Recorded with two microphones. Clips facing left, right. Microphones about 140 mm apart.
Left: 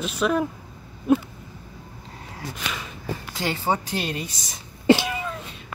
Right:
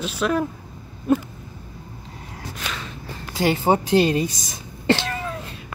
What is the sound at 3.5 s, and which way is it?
Speech, 20° right (ahead or behind).